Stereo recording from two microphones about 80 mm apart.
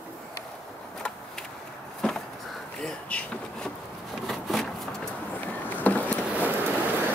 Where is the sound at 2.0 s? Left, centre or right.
Centre.